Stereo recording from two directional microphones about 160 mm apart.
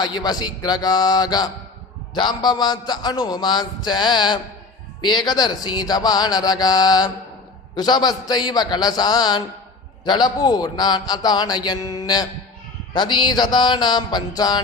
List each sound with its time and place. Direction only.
0.0 s a man's voice: 25° left (ahead or behind)